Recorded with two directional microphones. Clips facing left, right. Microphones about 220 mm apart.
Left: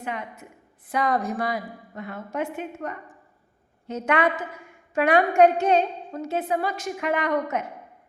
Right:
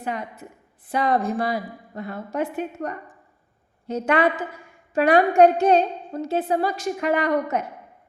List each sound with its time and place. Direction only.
0.0 s a woman's voice: 35° right (ahead or behind)